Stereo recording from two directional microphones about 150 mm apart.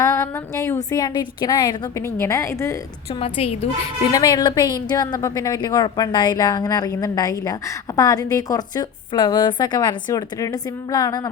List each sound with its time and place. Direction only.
0.0 s a woman's voice: 20° left (ahead or behind)
3.2 s a woman's voice: 40° left (ahead or behind)
4.1 s a woman's voice: 25° left (ahead or behind)